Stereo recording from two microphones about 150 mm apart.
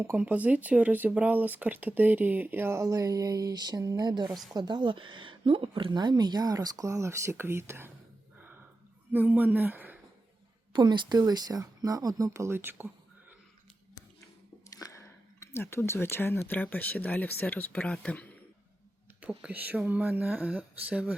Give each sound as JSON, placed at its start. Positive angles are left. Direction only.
{"t": 0.0, "sound": "speech", "side_deg": -10}
{"t": 4.3, "sound": "a woman's voice", "side_deg": 0}
{"t": 4.5, "sound": "speech", "side_deg": -30}
{"t": 9.1, "sound": "speech", "side_deg": -10}
{"t": 10.7, "sound": "speech", "side_deg": -30}
{"t": 14.7, "sound": "a sound", "side_deg": 25}
{"t": 16.5, "sound": "speech", "side_deg": 10}
{"t": 19.2, "sound": "speech", "side_deg": -10}